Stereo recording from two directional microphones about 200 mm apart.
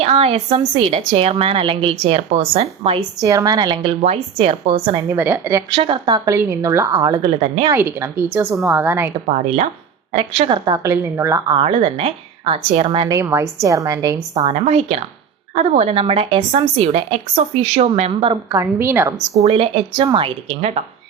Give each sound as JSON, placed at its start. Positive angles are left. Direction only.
{"t": 0.0, "sound": "a woman's voice", "side_deg": -30}
{"t": 3.2, "sound": "a woman's voice", "side_deg": -15}
{"t": 4.9, "sound": "speech", "side_deg": -10}
{"t": 5.7, "sound": "speech", "side_deg": -25}
{"t": 7.7, "sound": "speech", "side_deg": -10}
{"t": 9.3, "sound": "a woman's voice", "side_deg": -35}
{"t": 10.8, "sound": "a woman's voice", "side_deg": -15}
{"t": 13.1, "sound": "speech", "side_deg": -15}
{"t": 14.4, "sound": "a woman's voice", "side_deg": -30}
{"t": 18.5, "sound": "speech", "side_deg": -15}
{"t": 19.4, "sound": "a woman's voice", "side_deg": -30}